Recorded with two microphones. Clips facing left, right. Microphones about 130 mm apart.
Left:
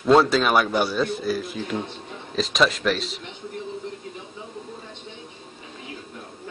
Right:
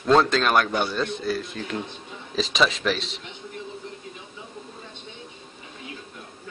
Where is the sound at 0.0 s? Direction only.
5° left (ahead or behind).